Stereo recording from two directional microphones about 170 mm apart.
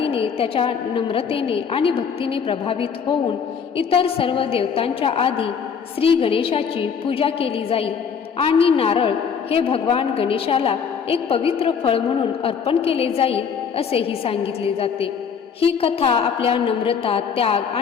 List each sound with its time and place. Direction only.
0.0 s a woman's voice: 30° left (ahead or behind)